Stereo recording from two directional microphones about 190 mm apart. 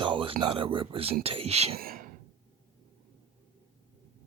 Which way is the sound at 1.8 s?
50° right (ahead or behind).